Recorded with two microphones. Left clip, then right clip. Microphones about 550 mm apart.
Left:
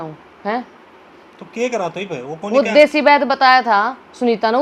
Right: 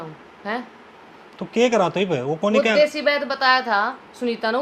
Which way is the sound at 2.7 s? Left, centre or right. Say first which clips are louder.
Left 7 dB; left.